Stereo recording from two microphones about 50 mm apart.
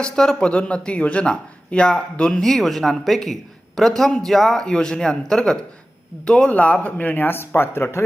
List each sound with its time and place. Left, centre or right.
0.0 s speech: centre
2.3 s a man's voice: centre
6.5 s speech: left
7.3 s speech: left